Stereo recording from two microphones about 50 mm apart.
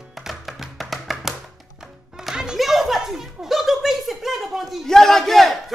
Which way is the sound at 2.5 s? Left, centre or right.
Centre.